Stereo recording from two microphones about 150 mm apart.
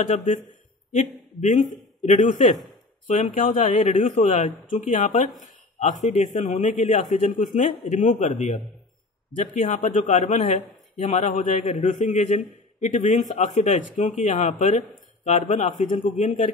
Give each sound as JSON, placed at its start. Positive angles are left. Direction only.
{"t": 0.0, "sound": "a man's voice", "side_deg": 55}